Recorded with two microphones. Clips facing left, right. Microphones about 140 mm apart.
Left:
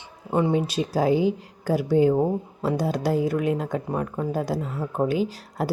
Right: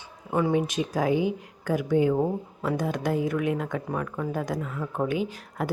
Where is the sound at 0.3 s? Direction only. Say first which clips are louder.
Left 2 dB; 25° left (ahead or behind).